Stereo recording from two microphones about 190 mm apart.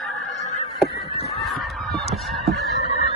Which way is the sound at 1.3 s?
Centre (ahead or behind).